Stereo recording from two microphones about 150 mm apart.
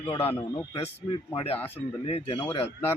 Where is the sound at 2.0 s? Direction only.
40° left (ahead or behind).